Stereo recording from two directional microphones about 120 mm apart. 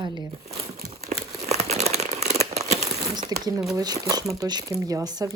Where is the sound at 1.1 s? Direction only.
90° right.